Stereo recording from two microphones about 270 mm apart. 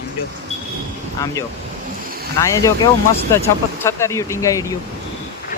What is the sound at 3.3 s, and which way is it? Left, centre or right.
Speech, centre.